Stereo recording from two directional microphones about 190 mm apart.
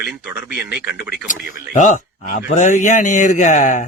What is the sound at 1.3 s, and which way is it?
A man's voice, 40° left (ahead or behind).